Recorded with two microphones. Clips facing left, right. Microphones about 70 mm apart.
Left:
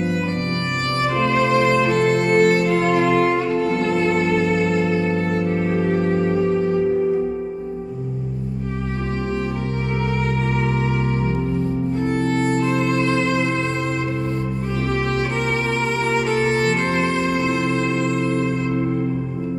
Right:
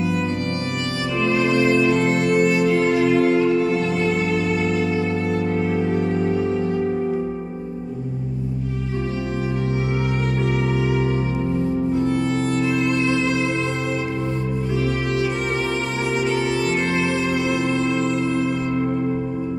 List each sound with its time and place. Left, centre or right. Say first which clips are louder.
1.2 s music: even; left
11.9 s music: even; left
16.6 s music: left 1 dB; left